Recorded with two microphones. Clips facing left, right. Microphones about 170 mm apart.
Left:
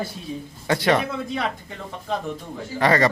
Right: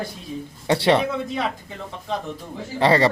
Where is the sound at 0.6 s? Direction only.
30° right (ahead or behind).